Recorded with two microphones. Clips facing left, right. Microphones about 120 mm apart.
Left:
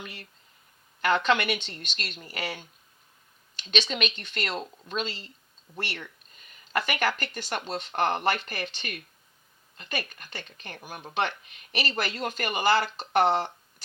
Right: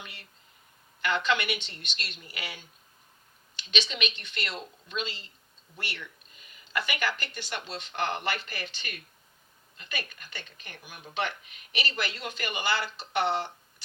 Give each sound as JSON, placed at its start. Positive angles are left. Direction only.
{"t": 0.0, "sound": "speech", "side_deg": 40}